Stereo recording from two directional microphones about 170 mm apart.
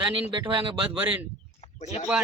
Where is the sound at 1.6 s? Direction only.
40° left (ahead or behind).